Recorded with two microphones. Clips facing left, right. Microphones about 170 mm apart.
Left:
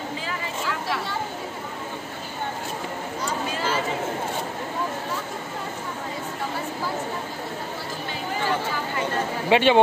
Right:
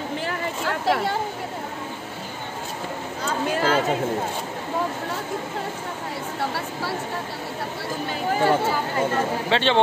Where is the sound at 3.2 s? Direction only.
60° right (ahead or behind).